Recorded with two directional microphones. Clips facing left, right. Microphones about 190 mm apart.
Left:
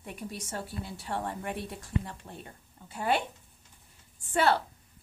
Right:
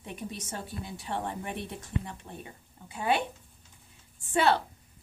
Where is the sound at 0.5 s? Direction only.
20° right (ahead or behind).